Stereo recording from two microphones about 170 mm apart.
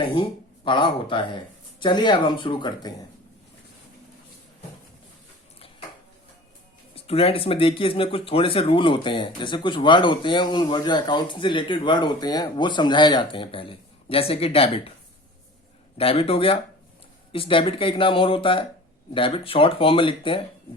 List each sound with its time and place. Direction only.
0.0 s speech: 30° left (ahead or behind)
6.9 s speech: 35° left (ahead or behind)
16.0 s speech: 35° left (ahead or behind)